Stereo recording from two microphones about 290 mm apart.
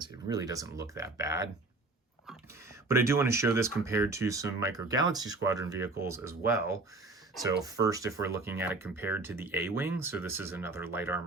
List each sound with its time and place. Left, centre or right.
0.0 s speech: centre
2.9 s speech: centre